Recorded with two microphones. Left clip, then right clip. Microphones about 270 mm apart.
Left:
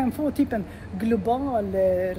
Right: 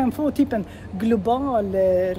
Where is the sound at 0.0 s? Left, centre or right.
Centre.